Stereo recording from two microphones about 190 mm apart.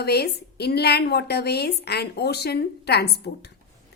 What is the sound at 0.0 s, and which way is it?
A woman's voice, 60° left (ahead or behind).